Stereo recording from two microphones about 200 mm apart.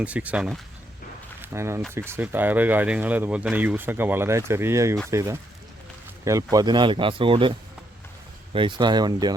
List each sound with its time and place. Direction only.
0.0 s speech: 5° right (ahead or behind); by 7.5 s 25° right (ahead or behind)
8.5 s speech: 25° right (ahead or behind)